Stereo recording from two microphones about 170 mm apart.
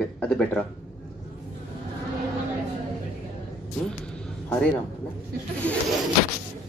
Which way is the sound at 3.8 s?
5° left (ahead or behind).